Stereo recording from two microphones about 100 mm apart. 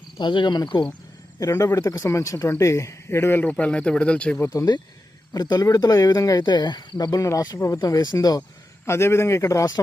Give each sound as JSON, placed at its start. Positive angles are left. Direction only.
{"t": 0.2, "sound": "speech", "side_deg": 50}
{"t": 1.4, "sound": "speech", "side_deg": 30}
{"t": 3.5, "sound": "speech", "side_deg": 10}
{"t": 5.3, "sound": "speech", "side_deg": 40}
{"t": 8.9, "sound": "a man's voice", "side_deg": 25}